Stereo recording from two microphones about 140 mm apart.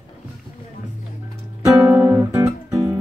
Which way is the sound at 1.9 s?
15° right (ahead or behind).